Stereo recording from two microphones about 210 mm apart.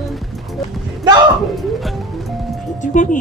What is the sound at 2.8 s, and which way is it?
Speech, 35° left (ahead or behind).